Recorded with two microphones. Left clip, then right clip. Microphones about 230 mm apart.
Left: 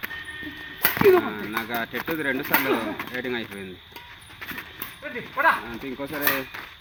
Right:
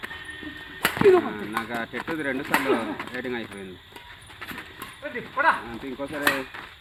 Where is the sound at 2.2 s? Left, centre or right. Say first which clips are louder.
Left 2 dB; left.